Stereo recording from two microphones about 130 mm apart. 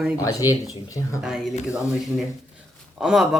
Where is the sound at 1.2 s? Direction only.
5° right (ahead or behind).